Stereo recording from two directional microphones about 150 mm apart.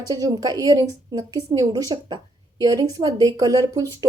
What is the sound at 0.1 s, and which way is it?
Speech, 25° right (ahead or behind).